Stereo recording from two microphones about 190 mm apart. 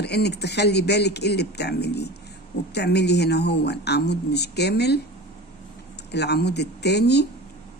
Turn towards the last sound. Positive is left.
turn(degrees=60)  # may be behind; listen again after turning